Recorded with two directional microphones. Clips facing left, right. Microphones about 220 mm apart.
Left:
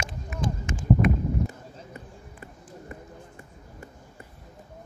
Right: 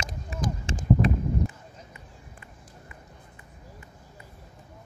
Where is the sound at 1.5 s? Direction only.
45° left (ahead or behind).